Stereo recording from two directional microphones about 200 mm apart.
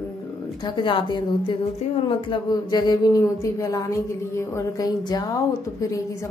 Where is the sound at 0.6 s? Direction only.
25° left (ahead or behind).